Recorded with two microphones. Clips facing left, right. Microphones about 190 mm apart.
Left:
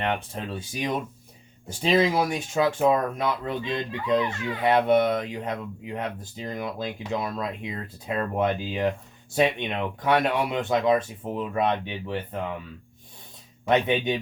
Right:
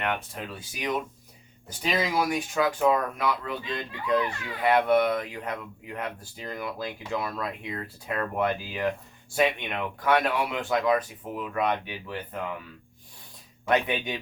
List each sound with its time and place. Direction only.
0.0 s speech: 30° left (ahead or behind)
13.7 s speech: 25° left (ahead or behind)